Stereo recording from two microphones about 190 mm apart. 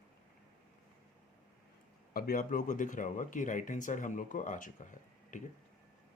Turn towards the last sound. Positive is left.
turn(degrees=40)  # may be behind; listen again after turning